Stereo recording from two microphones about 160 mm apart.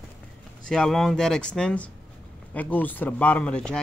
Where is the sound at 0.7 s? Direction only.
5° left (ahead or behind).